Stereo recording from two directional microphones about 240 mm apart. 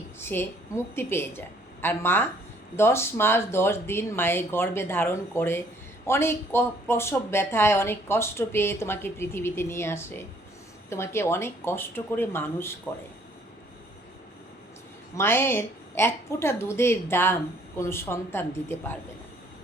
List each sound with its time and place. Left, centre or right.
0.2 s a woman's voice: centre
15.2 s a woman's voice: centre